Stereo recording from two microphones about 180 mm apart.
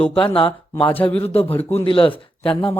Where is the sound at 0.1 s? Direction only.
30° left (ahead or behind).